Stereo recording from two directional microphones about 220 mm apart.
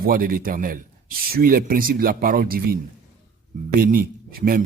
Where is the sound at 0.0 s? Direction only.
40° right (ahead or behind).